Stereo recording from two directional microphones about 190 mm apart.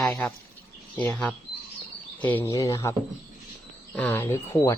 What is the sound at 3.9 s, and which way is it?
Speech, 10° left (ahead or behind).